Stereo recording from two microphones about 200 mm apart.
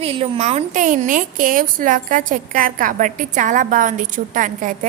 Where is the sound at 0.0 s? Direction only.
30° right (ahead or behind).